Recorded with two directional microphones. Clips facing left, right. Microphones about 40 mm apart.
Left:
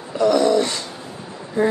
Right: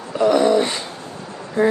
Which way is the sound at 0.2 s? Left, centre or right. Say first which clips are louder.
Right 1 dB; right.